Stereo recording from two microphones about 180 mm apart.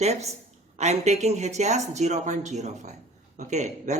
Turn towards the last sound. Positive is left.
turn(degrees=-40)  # may be behind; listen again after turning